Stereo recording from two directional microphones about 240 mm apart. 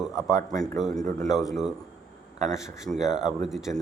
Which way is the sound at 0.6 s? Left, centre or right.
Centre.